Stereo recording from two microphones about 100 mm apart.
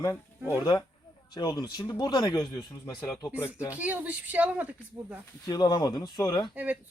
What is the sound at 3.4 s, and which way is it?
Speech, 25° left (ahead or behind).